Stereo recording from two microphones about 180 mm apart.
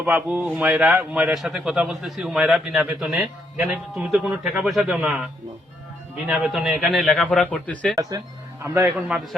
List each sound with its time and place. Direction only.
0.0 s a man's voice: 10° right (ahead or behind); by 7.9 s 5° left (ahead or behind)
8.6 s a man's voice: 10° right (ahead or behind)